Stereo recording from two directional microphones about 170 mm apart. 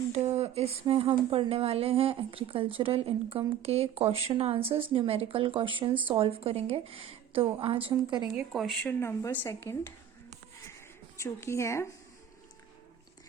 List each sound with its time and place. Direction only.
0.1 s speech: 40° right (ahead or behind)
8.4 s speech: centre (ahead or behind)
9.0 s a woman's voice: 15° left (ahead or behind)
10.8 s a sound: 15° left (ahead or behind)